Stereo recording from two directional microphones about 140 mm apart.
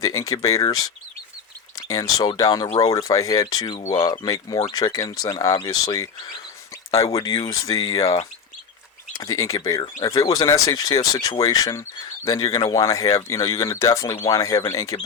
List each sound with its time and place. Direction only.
0.0 s speech: 25° left (ahead or behind)
1.9 s speech: 25° left (ahead or behind)
9.1 s speech: 25° left (ahead or behind)